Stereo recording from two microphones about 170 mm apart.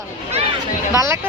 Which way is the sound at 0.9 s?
20° right (ahead or behind).